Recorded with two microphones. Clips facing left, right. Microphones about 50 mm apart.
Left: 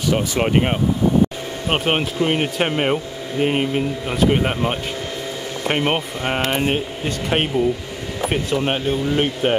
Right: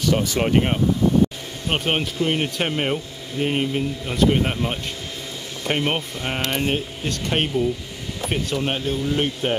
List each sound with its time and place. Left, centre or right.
0.1 s speech: centre